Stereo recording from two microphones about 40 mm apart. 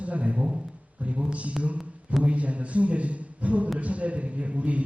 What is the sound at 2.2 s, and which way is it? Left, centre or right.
A man's voice, right.